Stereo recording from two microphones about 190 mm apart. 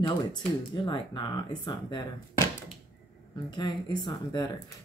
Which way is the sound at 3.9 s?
25° left (ahead or behind).